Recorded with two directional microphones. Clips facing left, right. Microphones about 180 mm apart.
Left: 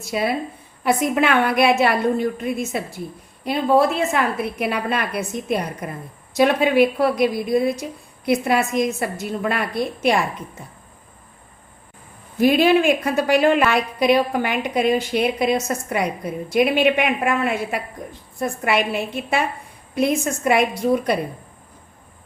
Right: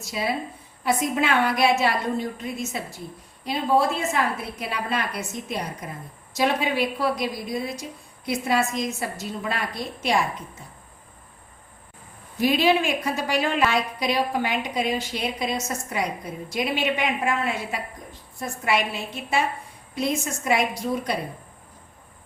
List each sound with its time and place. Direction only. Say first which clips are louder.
0.0 s a woman's voice: left 5 dB; 60° left (ahead or behind)
12.4 s a woman's voice: left 5 dB; 55° left (ahead or behind)